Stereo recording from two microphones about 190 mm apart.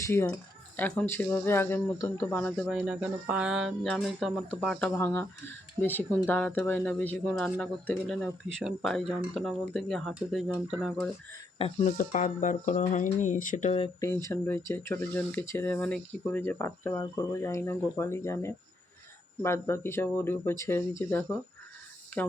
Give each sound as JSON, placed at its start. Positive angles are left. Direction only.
{"t": 0.0, "sound": "speech", "side_deg": 10}
{"t": 11.5, "sound": "speech", "side_deg": 30}
{"t": 14.0, "sound": "speech", "side_deg": 15}